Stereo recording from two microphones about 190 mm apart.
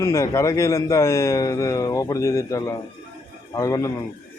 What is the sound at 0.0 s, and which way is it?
Speech, 15° left (ahead or behind).